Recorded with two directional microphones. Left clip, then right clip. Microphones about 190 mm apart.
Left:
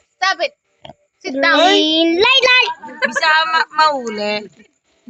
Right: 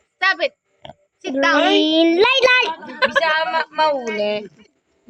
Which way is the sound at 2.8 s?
55° right (ahead or behind).